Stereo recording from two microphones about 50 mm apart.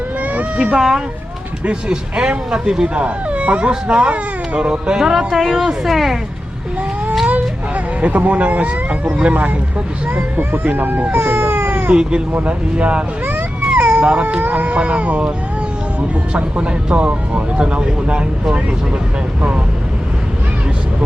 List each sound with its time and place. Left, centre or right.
0.2 s cat: right
0.8 s speech: centre
1.6 s speech: centre
8.0 s speech: right
11.9 s speech: centre